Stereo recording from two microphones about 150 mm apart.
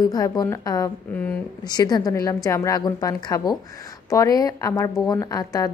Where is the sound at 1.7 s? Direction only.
25° left (ahead or behind).